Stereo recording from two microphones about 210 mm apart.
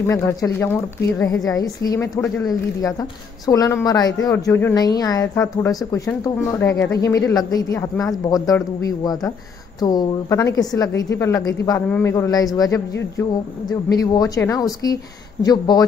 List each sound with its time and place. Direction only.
0.0 s a woman's voice: 15° left (ahead or behind)